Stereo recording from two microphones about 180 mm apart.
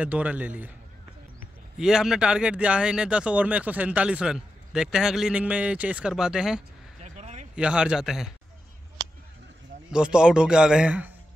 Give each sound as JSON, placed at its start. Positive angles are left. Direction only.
{"t": 0.0, "sound": "a man's voice", "side_deg": -10}
{"t": 1.8, "sound": "speech", "side_deg": -5}
{"t": 7.0, "sound": "a sound", "side_deg": -40}
{"t": 7.5, "sound": "speech", "side_deg": -5}
{"t": 9.9, "sound": "speech", "side_deg": -5}